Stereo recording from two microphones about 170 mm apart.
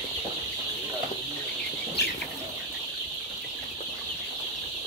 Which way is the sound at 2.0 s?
80° left.